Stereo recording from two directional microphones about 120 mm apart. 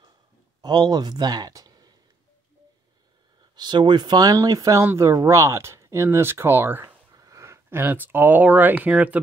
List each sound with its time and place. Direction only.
0.6 s speech: 35° right (ahead or behind)
3.5 s speech: 40° right (ahead or behind); by 7.0 s 20° right (ahead or behind)
7.1 s speech: 30° right (ahead or behind); by 9.2 s 10° right (ahead or behind)